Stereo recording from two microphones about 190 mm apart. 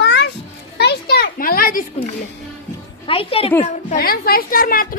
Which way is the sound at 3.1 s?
30° left (ahead or behind).